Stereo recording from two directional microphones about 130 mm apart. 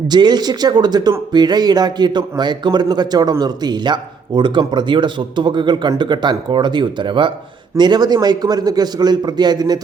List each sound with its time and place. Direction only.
0.1 s speech: 35° right (ahead or behind)